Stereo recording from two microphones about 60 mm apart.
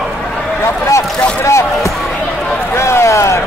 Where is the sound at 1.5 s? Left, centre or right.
Left.